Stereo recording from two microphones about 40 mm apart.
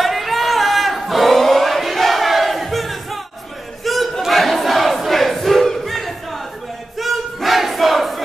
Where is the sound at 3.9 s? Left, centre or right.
Centre.